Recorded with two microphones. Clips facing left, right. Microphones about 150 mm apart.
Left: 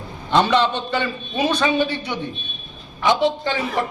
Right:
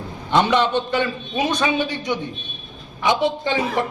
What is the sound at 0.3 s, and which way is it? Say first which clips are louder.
Speech: even; 15° right (ahead or behind).